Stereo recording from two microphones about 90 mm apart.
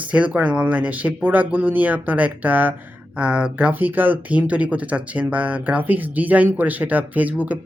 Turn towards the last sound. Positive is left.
turn(degrees=-15)  # may be behind; listen again after turning